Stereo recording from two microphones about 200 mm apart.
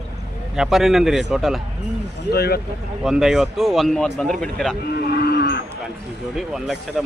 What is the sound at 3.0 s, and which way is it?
Speech, centre (ahead or behind).